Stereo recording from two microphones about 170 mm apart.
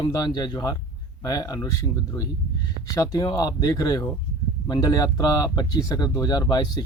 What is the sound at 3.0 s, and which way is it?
Speech, 20° left (ahead or behind).